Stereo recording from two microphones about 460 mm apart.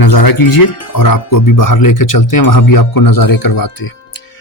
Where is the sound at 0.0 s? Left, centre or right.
Left.